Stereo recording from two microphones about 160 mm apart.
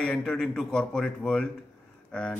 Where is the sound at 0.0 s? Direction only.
5° left (ahead or behind).